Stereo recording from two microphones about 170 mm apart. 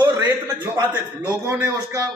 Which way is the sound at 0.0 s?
25° right (ahead or behind).